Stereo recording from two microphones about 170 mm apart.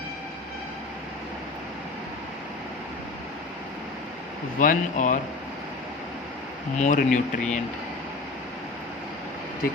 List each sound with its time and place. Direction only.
4.6 s speech: 50° left (ahead or behind)
6.7 s speech: 50° left (ahead or behind)